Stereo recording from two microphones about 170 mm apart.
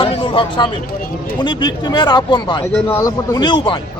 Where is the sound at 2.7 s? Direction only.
15° left (ahead or behind); by 3.8 s 30° left (ahead or behind).